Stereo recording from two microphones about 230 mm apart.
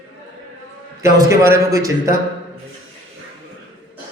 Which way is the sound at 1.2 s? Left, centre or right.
Centre.